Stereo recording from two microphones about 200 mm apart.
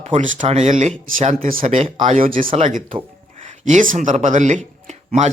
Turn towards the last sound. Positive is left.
turn(degrees=-35)  # may be behind; listen again after turning